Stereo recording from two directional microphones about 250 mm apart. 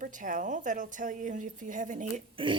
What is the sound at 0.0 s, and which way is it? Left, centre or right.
A woman's voice, right.